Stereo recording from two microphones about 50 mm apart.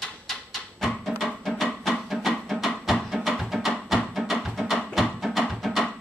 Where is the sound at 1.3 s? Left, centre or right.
Centre.